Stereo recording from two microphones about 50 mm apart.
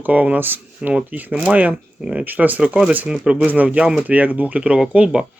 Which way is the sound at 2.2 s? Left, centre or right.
Right.